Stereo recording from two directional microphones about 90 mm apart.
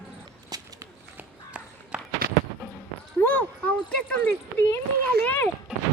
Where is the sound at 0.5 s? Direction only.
45° right (ahead or behind).